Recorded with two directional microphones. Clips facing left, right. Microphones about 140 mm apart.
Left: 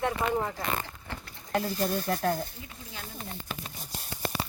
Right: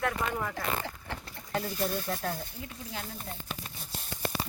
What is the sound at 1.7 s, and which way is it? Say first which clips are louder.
Speech: left 3 dB; 45° left (ahead or behind).